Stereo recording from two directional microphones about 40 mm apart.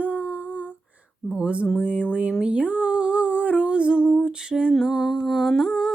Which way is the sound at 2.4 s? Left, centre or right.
Right.